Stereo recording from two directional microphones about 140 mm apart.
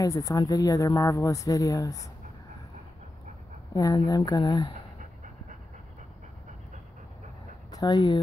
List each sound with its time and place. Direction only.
0.0 s speech: 25° left (ahead or behind)
3.7 s speech: 25° left (ahead or behind)
7.7 s speech: 30° left (ahead or behind)